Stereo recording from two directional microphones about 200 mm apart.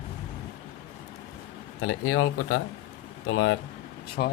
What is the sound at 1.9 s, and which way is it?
Speech, 90° left.